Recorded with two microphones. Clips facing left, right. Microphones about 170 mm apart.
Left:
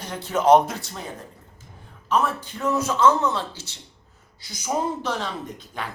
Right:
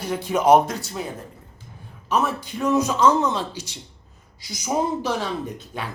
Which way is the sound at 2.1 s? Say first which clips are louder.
Even; 15° right (ahead or behind).